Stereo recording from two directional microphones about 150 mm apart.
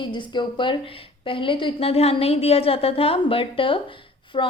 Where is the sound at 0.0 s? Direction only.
30° left (ahead or behind).